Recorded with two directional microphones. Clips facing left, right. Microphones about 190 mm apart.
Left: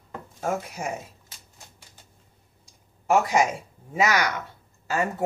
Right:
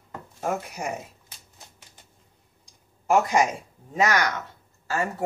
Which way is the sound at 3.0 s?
5° left (ahead or behind).